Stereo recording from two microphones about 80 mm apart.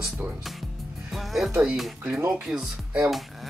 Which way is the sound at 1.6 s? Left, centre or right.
Centre.